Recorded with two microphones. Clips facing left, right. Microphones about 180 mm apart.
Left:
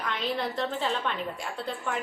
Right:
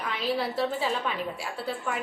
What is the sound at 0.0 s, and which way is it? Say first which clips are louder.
A woman's voice: right 2 dB; 5° right (ahead or behind).